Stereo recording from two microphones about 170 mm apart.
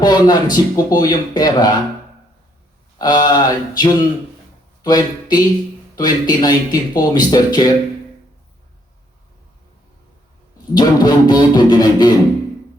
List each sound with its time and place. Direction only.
0.0 s speech: 25° left (ahead or behind)
3.0 s speech: 25° left (ahead or behind)
10.8 s speech: 25° left (ahead or behind)